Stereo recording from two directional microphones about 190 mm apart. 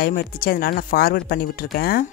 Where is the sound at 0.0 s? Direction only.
50° left (ahead or behind).